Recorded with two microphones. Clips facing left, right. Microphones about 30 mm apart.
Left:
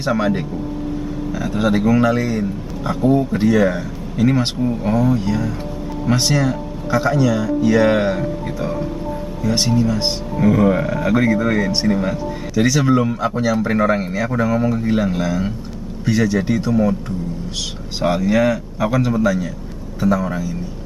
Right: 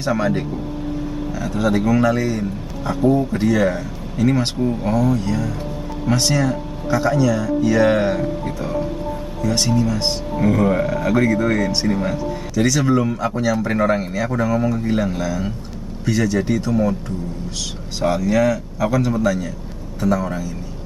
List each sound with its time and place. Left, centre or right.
0.0 s speech: centre
18.0 s speech: centre